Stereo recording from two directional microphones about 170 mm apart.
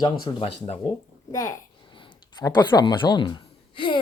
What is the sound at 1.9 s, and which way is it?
Speech, 25° left (ahead or behind).